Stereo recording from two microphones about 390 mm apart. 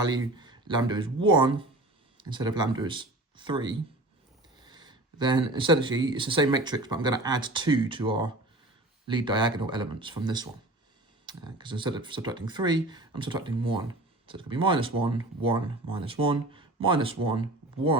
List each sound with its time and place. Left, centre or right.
0.0 s speech: centre